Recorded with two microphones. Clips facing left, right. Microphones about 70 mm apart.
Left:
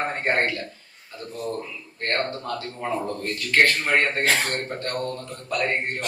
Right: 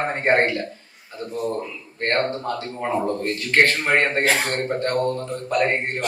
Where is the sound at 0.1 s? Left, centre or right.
Right.